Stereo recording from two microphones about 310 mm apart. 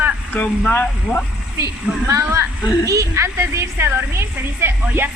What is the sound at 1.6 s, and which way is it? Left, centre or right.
A woman's voice, centre.